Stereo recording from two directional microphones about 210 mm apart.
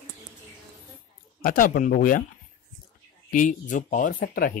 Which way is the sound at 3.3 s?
40° left (ahead or behind).